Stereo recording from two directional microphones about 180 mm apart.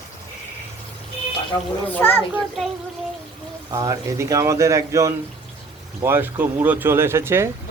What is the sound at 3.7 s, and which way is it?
Speech, 20° right (ahead or behind).